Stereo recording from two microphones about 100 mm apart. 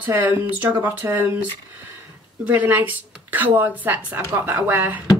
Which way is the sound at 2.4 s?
15° right (ahead or behind).